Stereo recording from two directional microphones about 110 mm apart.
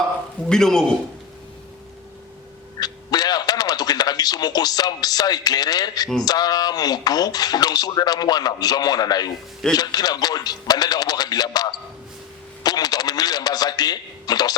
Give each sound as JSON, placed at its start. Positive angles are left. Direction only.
{"t": 0.4, "sound": "a man's voice", "side_deg": 5}
{"t": 2.8, "sound": "a sound", "side_deg": 35}
{"t": 6.2, "sound": "speech", "side_deg": 35}